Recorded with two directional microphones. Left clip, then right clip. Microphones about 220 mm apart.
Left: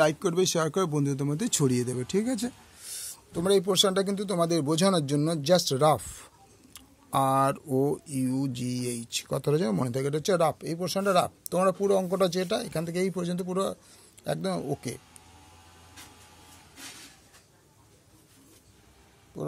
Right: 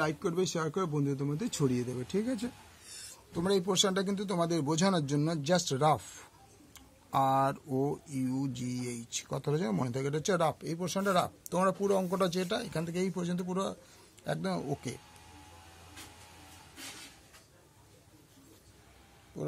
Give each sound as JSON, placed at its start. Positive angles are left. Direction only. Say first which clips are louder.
{"t": 0.0, "sound": "speech", "louder": "left 8 dB", "side_deg": 45}
{"t": 3.0, "sound": "a man's voice", "louder": "left 5 dB", "side_deg": 30}
{"t": 19.4, "sound": "a sound", "louder": "left 4 dB", "side_deg": 15}